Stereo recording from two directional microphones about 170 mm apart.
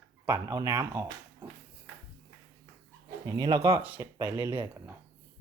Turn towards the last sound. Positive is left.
turn(degrees=-15)  # may be behind; listen again after turning